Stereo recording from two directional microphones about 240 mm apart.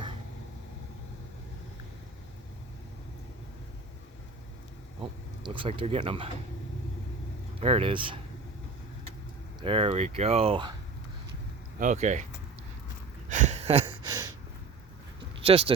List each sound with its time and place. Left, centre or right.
5.4 s speech: right
7.6 s speech: right
9.6 s speech: right
11.8 s speech: right
13.2 s a sound: right
15.4 s speech: right